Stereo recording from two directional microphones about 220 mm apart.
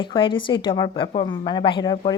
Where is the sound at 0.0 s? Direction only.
25° left (ahead or behind).